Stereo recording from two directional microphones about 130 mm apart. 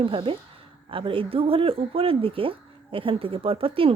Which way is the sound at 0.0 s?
40° right (ahead or behind).